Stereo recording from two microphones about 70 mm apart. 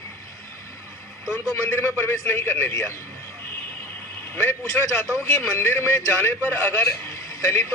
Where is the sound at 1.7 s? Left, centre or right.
Left.